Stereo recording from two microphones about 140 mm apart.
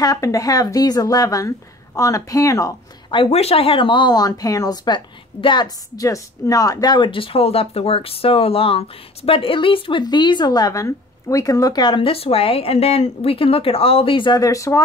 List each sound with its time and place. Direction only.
0.0 s a woman's voice: 25° left (ahead or behind)
3.1 s speech: 40° left (ahead or behind); by 14.8 s 20° left (ahead or behind)